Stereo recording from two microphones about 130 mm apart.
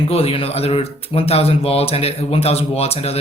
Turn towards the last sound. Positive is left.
turn(degrees=50)  # may be behind; listen again after turning